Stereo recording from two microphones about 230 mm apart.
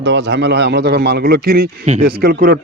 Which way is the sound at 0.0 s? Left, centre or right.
Right.